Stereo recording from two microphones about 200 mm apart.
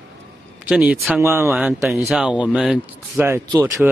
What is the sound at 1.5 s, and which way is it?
Speech, centre (ahead or behind).